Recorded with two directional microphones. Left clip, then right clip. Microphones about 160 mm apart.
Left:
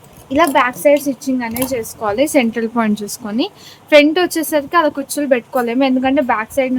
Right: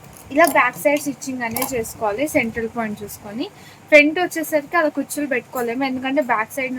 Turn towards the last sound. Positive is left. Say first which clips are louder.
# left 5 dB
turn(degrees=45)  # may be behind; listen again after turning